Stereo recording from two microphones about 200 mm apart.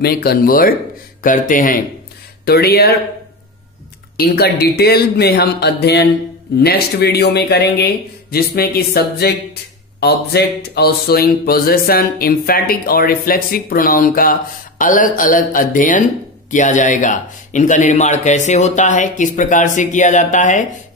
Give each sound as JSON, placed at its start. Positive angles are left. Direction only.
{"t": 0.0, "sound": "a man's voice", "side_deg": 50}
{"t": 2.4, "sound": "a man's voice", "side_deg": 50}
{"t": 4.2, "sound": "a man's voice", "side_deg": 50}